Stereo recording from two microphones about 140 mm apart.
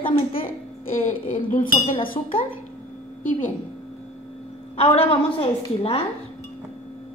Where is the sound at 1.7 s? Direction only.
40° left (ahead or behind).